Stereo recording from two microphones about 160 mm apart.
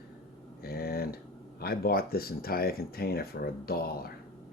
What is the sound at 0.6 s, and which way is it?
Speech, 75° left (ahead or behind).